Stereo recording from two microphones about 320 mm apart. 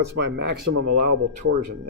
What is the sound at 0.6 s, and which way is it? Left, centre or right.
Speech, right.